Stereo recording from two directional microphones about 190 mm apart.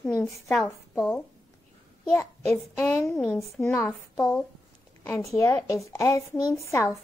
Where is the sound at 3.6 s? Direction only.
15° left (ahead or behind).